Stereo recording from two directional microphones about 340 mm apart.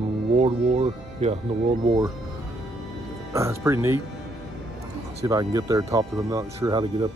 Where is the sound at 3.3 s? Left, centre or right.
Centre.